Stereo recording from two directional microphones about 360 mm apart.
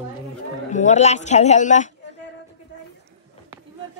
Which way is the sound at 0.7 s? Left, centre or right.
Centre.